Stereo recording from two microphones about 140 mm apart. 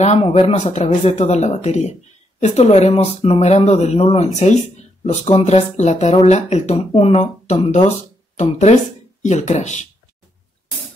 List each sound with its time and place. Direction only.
0.0 s speech: 50° left (ahead or behind)